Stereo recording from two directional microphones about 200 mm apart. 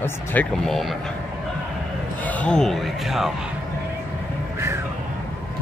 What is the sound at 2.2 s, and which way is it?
Speech, 5° left (ahead or behind).